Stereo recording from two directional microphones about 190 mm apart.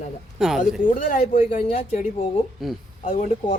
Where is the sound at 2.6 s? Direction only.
Centre (ahead or behind).